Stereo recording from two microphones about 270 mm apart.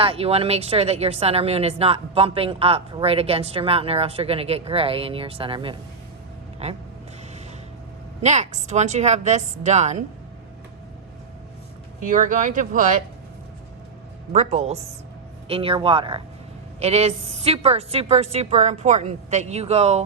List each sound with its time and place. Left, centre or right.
0.0 s speech: right
8.2 s speech: right
11.9 s speech: right
14.3 s speech: right